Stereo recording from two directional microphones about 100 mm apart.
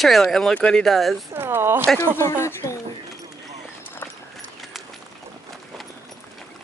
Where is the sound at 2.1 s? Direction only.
25° left (ahead or behind).